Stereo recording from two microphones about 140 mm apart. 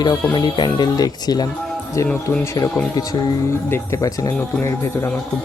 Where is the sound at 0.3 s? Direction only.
35° left (ahead or behind).